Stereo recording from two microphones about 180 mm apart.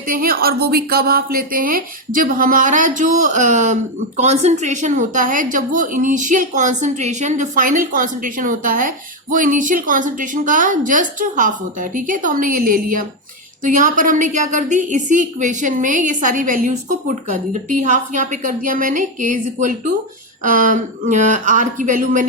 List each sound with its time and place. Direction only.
0.1 s a woman's voice: 55° right (ahead or behind)